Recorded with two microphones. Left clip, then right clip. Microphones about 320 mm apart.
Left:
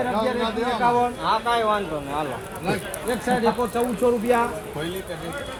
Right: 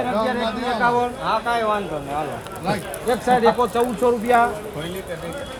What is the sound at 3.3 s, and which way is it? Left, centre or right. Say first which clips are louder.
Speech: right 6 dB; centre.